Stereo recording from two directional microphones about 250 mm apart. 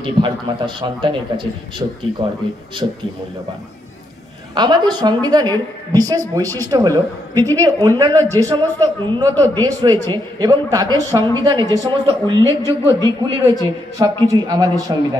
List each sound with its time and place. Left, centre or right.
0.0 s a man's voice: centre
4.6 s a woman's voice: centre